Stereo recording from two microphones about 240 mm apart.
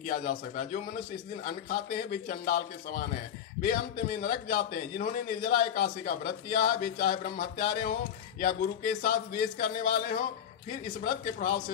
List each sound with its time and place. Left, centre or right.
0.0 s a man's voice: left